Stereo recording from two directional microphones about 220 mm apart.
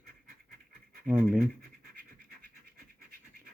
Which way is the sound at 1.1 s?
10° right (ahead or behind).